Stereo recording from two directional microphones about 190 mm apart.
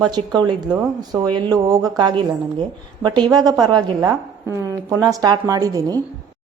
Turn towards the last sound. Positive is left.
turn(degrees=-20)  # may be behind; listen again after turning